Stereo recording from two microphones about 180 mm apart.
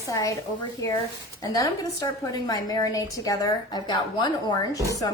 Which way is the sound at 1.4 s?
20° left (ahead or behind).